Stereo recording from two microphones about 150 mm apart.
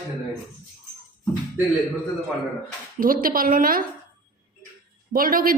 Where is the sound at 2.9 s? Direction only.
70° right (ahead or behind).